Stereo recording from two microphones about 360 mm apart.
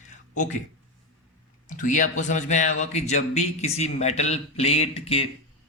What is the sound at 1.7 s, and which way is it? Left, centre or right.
Speech, left.